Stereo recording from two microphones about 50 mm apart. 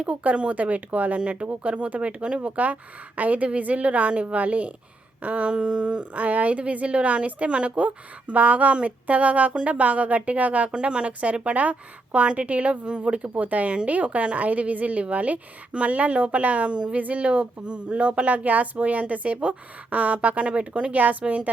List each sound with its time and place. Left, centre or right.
0.0 s speech: right